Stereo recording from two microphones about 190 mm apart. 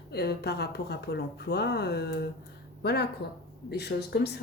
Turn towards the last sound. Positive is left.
turn(degrees=60)  # may be behind; listen again after turning